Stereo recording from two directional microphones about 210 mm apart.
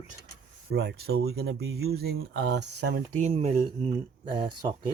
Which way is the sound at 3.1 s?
35° right (ahead or behind).